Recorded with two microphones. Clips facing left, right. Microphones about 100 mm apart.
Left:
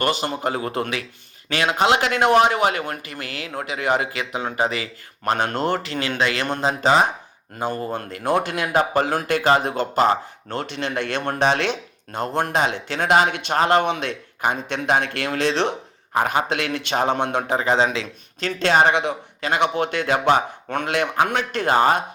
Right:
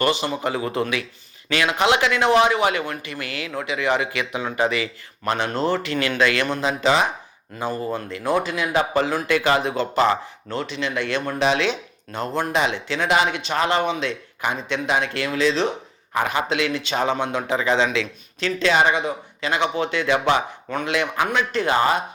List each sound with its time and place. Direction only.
0.0 s speech: 50° left (ahead or behind)
5.5 s speech: 55° left (ahead or behind)
5.8 s speech: 30° left (ahead or behind)
6.5 s speech: 40° left (ahead or behind)
7.9 s speech: 60° left (ahead or behind)
16.1 s speech: 45° left (ahead or behind)
18.9 s speech: 65° left (ahead or behind)
19.5 s speech: 55° left (ahead or behind)